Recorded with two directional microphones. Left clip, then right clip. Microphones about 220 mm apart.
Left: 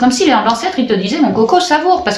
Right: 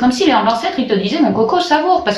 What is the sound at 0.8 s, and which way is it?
Speech, 35° left (ahead or behind).